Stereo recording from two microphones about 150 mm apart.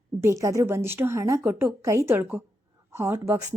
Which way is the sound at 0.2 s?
20° right (ahead or behind).